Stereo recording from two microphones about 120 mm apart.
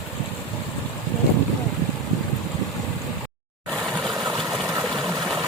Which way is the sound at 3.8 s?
Centre (ahead or behind).